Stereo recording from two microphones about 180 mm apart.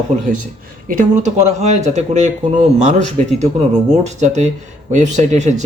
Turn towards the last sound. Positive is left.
turn(degrees=-40)  # may be behind; listen again after turning